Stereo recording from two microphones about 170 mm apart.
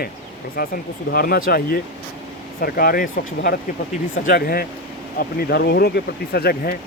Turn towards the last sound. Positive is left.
turn(degrees=65)  # may be behind; listen again after turning